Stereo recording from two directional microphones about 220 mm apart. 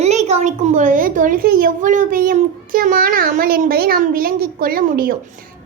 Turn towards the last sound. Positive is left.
turn(degrees=-40)  # may be behind; listen again after turning